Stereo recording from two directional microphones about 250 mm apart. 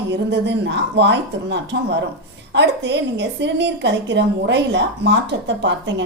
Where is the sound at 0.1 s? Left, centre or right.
Right.